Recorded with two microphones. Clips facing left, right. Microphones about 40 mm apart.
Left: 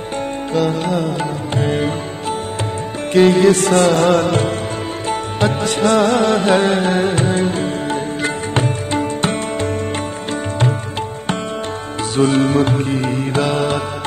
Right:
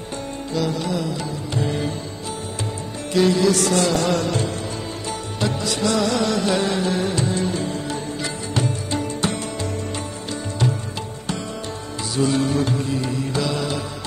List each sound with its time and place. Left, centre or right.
0.5 s music: left
3.1 s music: left
12.2 s music: left